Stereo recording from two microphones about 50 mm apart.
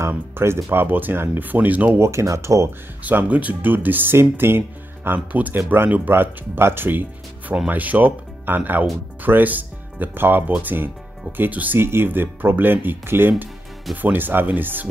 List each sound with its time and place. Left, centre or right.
0.4 s speech: right
1.5 s speech: right
2.0 s speech: right
3.0 s speech: right
5.3 s speech: right
6.0 s speech: right
11.8 s speech: right